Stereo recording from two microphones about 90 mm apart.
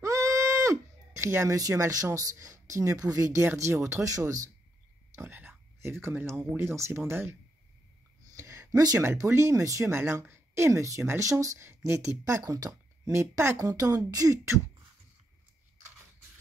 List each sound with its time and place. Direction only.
0.0 s speech: 35° right (ahead or behind)
5.1 s speech: 25° right (ahead or behind)
8.4 s a sound: 35° right (ahead or behind)
9.0 s speech: 30° right (ahead or behind)